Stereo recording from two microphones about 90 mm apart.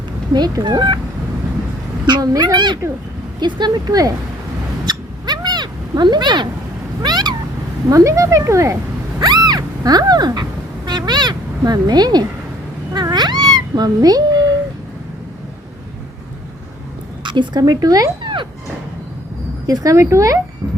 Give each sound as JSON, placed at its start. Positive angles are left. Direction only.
{"t": 0.3, "sound": "speech", "side_deg": -50}
{"t": 2.0, "sound": "speech", "side_deg": -50}
{"t": 4.9, "sound": "cat", "side_deg": -50}
{"t": 7.9, "sound": "speech", "side_deg": -40}
{"t": 9.2, "sound": "speech", "side_deg": -50}
{"t": 12.9, "sound": "cat", "side_deg": -50}
{"t": 17.2, "sound": "a woman's voice", "side_deg": -60}
{"t": 17.6, "sound": "speech", "side_deg": -45}
{"t": 18.2, "sound": "a sound", "side_deg": -65}
{"t": 19.6, "sound": "speech", "side_deg": -40}